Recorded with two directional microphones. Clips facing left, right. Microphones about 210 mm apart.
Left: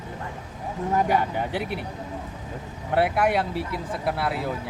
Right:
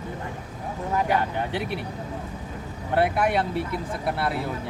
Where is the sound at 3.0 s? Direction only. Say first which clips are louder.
Even; 5° left (ahead or behind).